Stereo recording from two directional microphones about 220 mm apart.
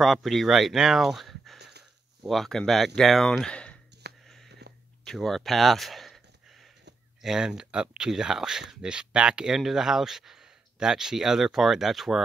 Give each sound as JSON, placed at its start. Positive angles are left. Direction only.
{"t": 0.0, "sound": "speech", "side_deg": 0}
{"t": 3.9, "sound": "a sound", "side_deg": -50}
{"t": 5.0, "sound": "speech", "side_deg": 0}
{"t": 7.2, "sound": "speech", "side_deg": 0}